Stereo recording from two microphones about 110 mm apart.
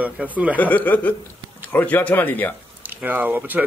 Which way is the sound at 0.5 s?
15° left (ahead or behind).